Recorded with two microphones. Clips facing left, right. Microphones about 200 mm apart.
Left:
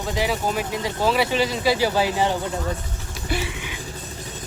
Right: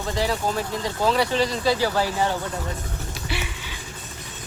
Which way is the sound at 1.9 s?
20° left (ahead or behind).